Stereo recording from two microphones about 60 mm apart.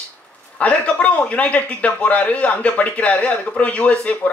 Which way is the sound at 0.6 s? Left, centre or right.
Left.